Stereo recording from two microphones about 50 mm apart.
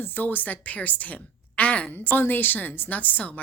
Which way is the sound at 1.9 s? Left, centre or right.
Left.